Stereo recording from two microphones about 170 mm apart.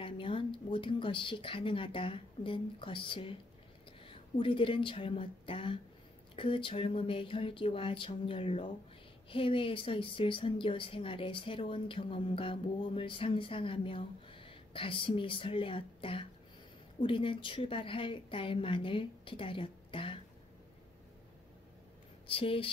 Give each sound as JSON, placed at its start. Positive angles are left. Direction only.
{"t": 0.0, "sound": "a woman's voice", "side_deg": 30}
{"t": 22.3, "sound": "a woman's voice", "side_deg": 35}